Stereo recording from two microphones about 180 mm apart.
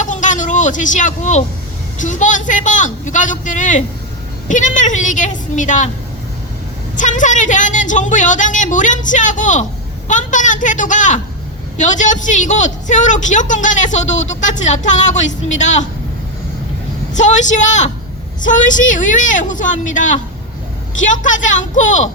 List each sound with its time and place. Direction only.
0.0 s vehicle: 45° left (ahead or behind)
2.0 s a woman's voice: 45° left (ahead or behind)
6.9 s a woman's voice: 45° left (ahead or behind)
17.2 s a woman's voice: 40° left (ahead or behind)